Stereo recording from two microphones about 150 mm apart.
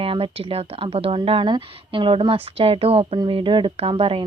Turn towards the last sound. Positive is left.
turn(degrees=-40)  # may be behind; listen again after turning